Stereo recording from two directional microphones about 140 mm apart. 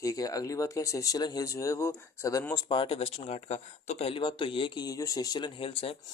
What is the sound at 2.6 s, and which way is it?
Speech, 40° left (ahead or behind).